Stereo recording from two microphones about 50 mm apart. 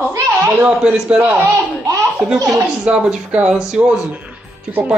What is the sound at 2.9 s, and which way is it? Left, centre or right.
Speech, right.